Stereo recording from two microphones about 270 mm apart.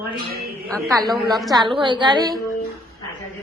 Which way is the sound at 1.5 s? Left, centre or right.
Centre.